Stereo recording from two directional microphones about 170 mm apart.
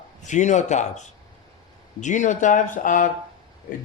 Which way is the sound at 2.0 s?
45° left (ahead or behind).